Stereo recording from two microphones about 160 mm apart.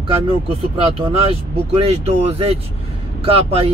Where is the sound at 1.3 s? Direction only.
35° right (ahead or behind).